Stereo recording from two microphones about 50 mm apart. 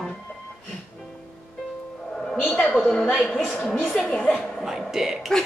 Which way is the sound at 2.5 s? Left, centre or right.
Centre.